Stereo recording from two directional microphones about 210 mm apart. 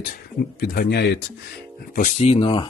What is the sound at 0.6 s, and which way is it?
Speech, 50° left (ahead or behind).